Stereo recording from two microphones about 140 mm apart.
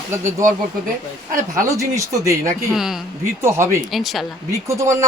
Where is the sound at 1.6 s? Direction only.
20° right (ahead or behind).